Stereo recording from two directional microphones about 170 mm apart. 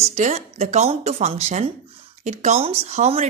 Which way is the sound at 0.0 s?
45° right (ahead or behind).